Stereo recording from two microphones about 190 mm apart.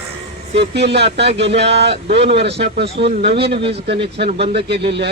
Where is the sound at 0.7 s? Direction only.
60° right (ahead or behind).